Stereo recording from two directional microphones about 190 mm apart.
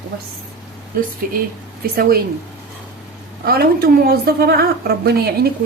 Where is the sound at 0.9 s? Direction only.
45° right (ahead or behind).